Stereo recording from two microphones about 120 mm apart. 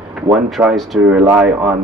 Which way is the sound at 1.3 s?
15° right (ahead or behind).